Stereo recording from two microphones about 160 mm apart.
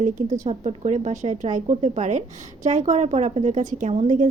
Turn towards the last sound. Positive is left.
turn(degrees=-45)  # may be behind; listen again after turning